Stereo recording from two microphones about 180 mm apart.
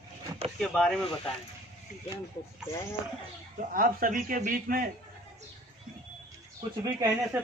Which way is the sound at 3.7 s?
50° right (ahead or behind).